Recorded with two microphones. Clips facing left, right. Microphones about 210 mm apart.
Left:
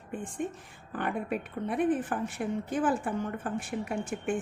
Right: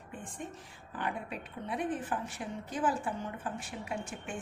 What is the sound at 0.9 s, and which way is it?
A woman's voice, 55° left (ahead or behind).